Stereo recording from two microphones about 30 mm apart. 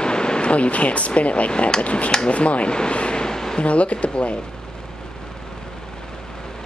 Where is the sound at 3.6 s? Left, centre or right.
Left.